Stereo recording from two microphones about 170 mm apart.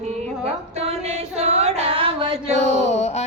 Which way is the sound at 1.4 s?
40° right (ahead or behind).